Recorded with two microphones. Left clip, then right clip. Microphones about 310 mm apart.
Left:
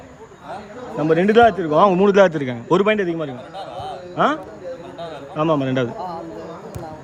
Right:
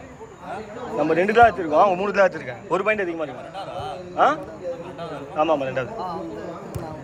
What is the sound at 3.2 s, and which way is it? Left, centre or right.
Speech, left.